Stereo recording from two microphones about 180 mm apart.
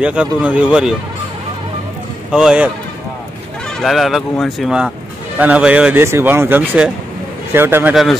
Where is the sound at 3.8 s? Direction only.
Centre (ahead or behind).